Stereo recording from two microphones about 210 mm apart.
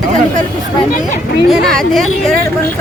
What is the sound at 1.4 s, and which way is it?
Speech, centre (ahead or behind).